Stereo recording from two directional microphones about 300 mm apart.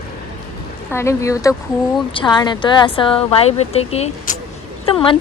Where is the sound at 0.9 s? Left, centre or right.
Centre.